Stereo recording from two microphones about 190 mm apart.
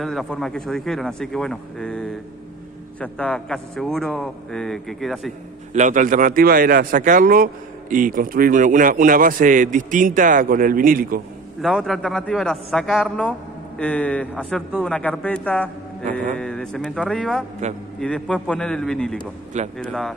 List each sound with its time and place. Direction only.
0.0 s a man's voice: centre (ahead or behind)
5.7 s a man's voice: 40° right (ahead or behind)
11.6 s a man's voice: centre (ahead or behind)